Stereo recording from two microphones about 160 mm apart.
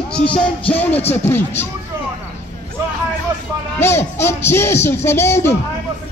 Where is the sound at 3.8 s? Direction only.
15° left (ahead or behind).